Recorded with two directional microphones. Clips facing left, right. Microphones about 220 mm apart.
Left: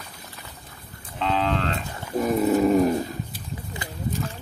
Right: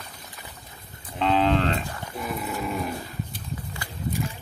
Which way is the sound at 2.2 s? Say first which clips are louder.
Left 12 dB; 40° left (ahead or behind).